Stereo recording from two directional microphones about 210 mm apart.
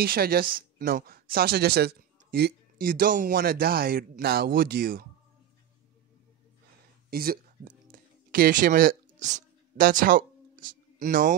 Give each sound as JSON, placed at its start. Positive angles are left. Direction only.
{"t": 0.0, "sound": "speech", "side_deg": -45}
{"t": 7.1, "sound": "speech", "side_deg": -45}
{"t": 7.9, "sound": "a sound", "side_deg": -40}
{"t": 11.0, "sound": "speech", "side_deg": -40}